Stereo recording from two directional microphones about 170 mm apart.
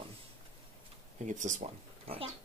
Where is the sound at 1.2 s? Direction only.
45° right (ahead or behind).